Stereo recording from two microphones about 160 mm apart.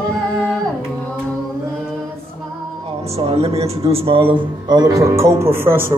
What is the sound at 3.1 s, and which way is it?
A man's voice, 40° right (ahead or behind).